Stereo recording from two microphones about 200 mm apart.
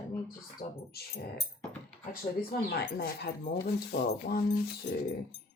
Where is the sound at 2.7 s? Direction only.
50° left (ahead or behind).